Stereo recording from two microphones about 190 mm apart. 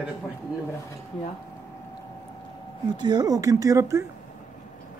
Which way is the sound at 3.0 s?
20° right (ahead or behind).